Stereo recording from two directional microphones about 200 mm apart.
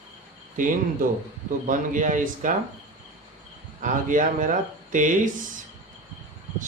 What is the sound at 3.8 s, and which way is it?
Speech, 40° right (ahead or behind).